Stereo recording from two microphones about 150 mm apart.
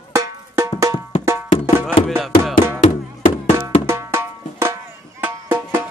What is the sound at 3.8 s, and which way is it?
Music, 15° right (ahead or behind).